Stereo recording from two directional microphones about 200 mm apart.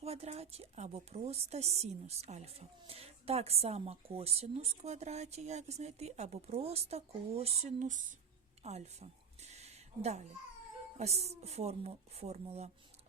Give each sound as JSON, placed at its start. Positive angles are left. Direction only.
{"t": 0.0, "sound": "a woman's voice", "side_deg": -30}
{"t": 8.6, "sound": "a sound", "side_deg": -35}
{"t": 10.9, "sound": "a woman's voice", "side_deg": -30}